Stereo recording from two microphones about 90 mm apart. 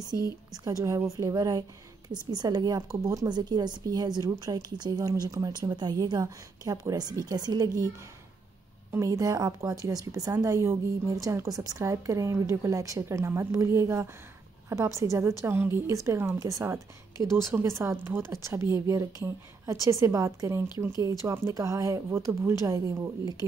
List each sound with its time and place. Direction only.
0.7 s a woman's voice: 40° right (ahead or behind)
3.3 s speech: 55° right (ahead or behind)
8.9 s a woman's voice: 35° right (ahead or behind)